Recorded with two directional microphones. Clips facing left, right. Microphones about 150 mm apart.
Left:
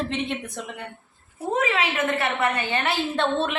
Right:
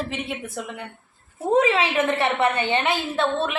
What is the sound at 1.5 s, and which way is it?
A woman's voice, 30° right (ahead or behind).